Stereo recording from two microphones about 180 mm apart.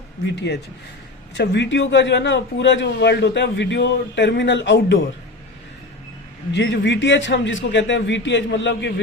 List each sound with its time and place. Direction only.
0.3 s speech: 70° left (ahead or behind); by 4.9 s 90° left
6.5 s a man's voice: 80° left